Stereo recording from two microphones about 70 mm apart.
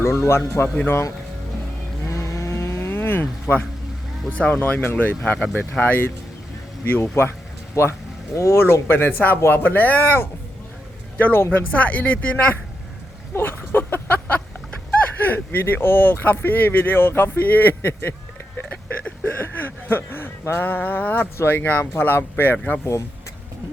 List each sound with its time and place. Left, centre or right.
0.0 s speech: left
2.0 s cattle: left
4.3 s speech: left
7.8 s speech: left; by 12.5 s centre
13.3 s a sound: left
14.8 s speech: left
19.0 s a sound: left
21.3 s speech: left